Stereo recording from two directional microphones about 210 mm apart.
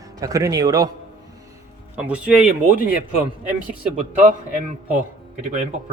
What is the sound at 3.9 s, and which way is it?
Speech, 35° right (ahead or behind).